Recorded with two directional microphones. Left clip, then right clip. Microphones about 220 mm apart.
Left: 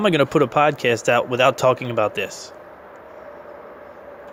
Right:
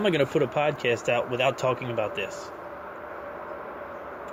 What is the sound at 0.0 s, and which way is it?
Speech, 45° left (ahead or behind).